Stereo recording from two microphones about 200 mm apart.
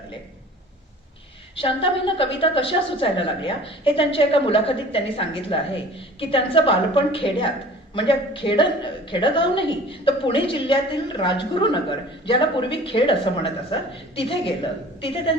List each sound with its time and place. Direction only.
1.5 s a woman's voice: 25° left (ahead or behind)